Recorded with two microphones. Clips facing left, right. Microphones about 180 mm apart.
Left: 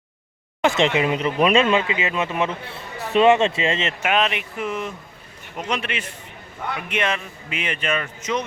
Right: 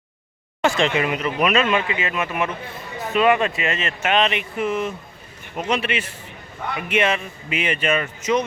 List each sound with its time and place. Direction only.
0.6 s speech: 20° left (ahead or behind)
1.9 s speech: 20° left (ahead or behind)
4.0 s a man's voice: 5° left (ahead or behind)